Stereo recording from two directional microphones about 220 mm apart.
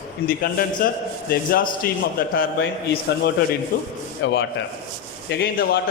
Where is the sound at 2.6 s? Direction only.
50° left (ahead or behind).